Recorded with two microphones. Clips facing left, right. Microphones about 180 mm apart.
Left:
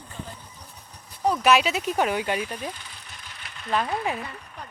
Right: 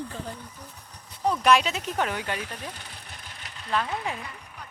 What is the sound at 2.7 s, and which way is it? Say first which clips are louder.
Vehicle: right 1 dB; 60° right (ahead or behind).